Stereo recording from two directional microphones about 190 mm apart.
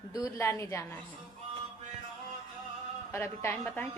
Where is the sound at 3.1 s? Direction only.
15° left (ahead or behind).